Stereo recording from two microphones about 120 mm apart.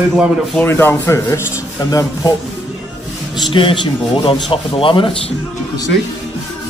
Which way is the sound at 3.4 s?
45° left (ahead or behind).